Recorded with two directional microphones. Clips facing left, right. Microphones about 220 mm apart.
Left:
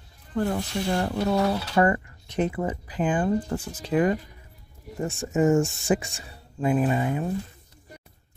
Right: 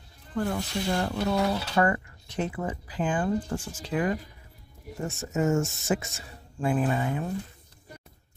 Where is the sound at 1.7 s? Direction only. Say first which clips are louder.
Left 3 dB; 20° left (ahead or behind).